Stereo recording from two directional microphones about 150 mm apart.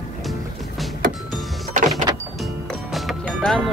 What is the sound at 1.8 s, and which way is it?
Power windows, 60° right (ahead or behind).